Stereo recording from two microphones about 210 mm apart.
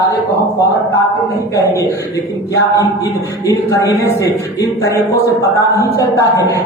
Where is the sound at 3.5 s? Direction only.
15° left (ahead or behind).